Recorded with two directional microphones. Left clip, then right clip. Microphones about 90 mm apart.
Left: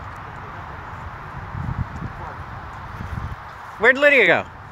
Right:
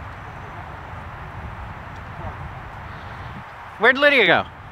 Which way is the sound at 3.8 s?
10° right (ahead or behind).